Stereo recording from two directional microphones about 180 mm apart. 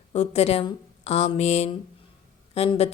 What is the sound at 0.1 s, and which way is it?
Speech, 35° left (ahead or behind).